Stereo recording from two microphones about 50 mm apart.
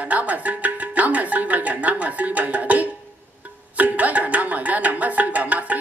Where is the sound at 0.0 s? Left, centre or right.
Right.